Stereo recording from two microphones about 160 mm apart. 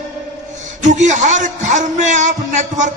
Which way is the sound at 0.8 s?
50° right (ahead or behind).